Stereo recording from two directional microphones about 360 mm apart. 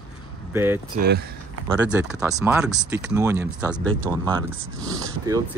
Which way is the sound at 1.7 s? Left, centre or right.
Centre.